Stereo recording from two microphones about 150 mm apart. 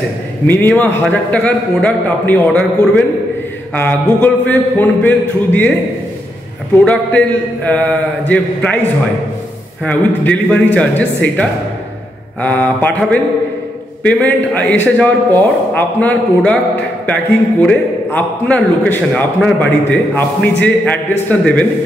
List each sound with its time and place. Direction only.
0.5 s a man's voice: 10° left (ahead or behind)
6.8 s a man's voice: 10° left (ahead or behind)
9.8 s a man's voice: 10° left (ahead or behind)